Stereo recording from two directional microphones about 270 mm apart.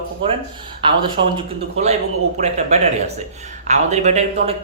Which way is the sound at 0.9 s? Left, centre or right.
Centre.